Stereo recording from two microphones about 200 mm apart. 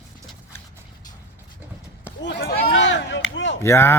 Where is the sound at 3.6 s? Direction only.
15° left (ahead or behind).